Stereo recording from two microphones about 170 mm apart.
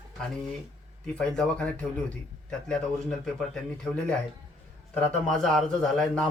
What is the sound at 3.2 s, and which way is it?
Speech, centre (ahead or behind).